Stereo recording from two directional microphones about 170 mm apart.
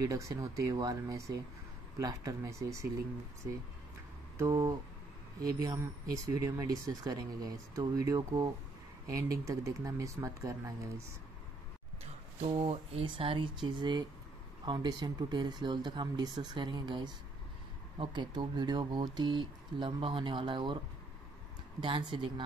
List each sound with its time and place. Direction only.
0.0 s speech: 20° right (ahead or behind)
4.4 s speech: 20° right (ahead or behind)
12.4 s speech: 35° right (ahead or behind)
21.8 s speech: 30° right (ahead or behind)